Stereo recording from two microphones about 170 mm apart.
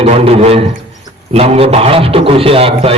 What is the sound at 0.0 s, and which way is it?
A man's voice, 35° right (ahead or behind).